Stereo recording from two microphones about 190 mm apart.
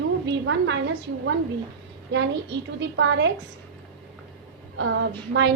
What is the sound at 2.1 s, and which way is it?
A woman's voice, 70° right (ahead or behind).